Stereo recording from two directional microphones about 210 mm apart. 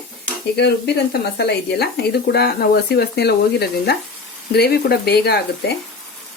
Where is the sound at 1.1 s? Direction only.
50° left (ahead or behind).